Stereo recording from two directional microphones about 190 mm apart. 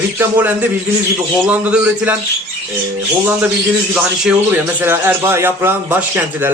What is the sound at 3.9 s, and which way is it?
A man's voice, 5° right (ahead or behind).